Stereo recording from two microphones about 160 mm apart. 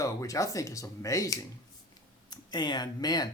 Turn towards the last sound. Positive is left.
turn(degrees=25)  # may be behind; listen again after turning